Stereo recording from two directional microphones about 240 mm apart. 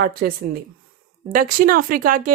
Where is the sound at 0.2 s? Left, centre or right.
Right.